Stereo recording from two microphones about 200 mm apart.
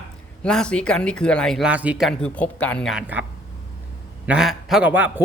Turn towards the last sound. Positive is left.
turn(degrees=-10)  # may be behind; listen again after turning